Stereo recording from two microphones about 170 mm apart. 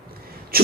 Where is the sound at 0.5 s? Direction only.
60° right (ahead or behind).